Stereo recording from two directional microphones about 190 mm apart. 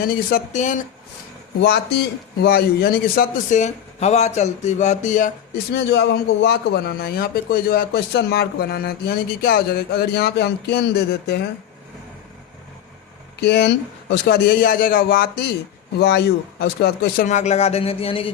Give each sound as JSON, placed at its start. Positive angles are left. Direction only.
{"t": 0.0, "sound": "a man's voice", "side_deg": 50}
{"t": 1.6, "sound": "a man's voice", "side_deg": 60}
{"t": 5.7, "sound": "a man's voice", "side_deg": 65}
{"t": 13.4, "sound": "a man's voice", "side_deg": 60}
{"t": 17.2, "sound": "speech", "side_deg": 40}